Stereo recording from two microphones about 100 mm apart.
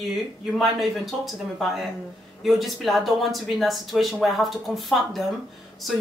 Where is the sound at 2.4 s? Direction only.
Centre (ahead or behind).